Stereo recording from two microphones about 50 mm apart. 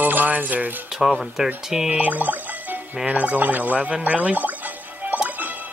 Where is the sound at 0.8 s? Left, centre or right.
Centre.